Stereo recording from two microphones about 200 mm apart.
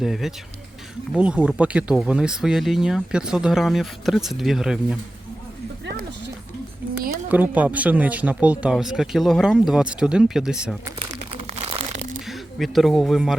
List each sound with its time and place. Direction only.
0.0 s speech: centre (ahead or behind)
7.1 s speech: 10° right (ahead or behind)
10.8 s crumpling: 25° right (ahead or behind)
12.2 s speech: centre (ahead or behind)